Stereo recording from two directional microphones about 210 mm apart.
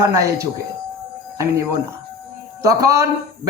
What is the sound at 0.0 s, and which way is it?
A man's voice, 15° right (ahead or behind).